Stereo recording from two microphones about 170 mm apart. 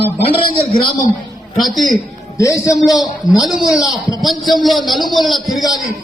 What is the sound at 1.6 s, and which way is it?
Speech, centre (ahead or behind).